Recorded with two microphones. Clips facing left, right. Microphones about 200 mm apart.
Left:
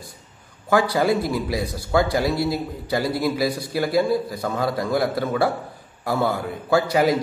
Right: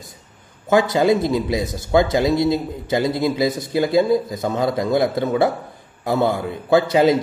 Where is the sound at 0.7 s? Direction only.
20° right (ahead or behind).